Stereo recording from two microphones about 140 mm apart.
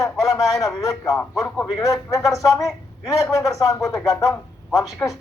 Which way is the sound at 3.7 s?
20° left (ahead or behind).